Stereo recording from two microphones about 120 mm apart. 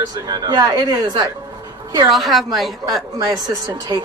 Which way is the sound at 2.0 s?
Centre (ahead or behind).